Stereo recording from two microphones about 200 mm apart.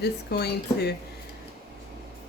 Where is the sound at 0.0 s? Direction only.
55° left (ahead or behind).